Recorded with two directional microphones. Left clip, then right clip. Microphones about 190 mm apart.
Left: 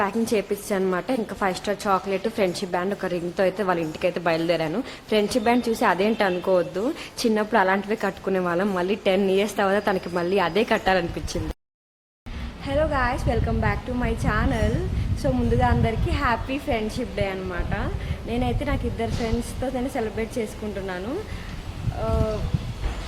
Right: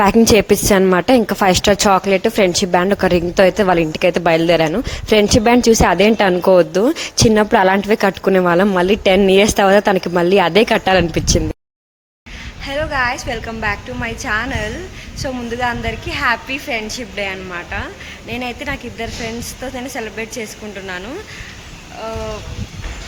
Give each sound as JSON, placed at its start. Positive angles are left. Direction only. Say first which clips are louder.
{"t": 0.0, "sound": "a woman's voice", "louder": "right 12 dB", "side_deg": -55}
{"t": 12.6, "sound": "a woman's voice", "louder": "right 5 dB", "side_deg": 0}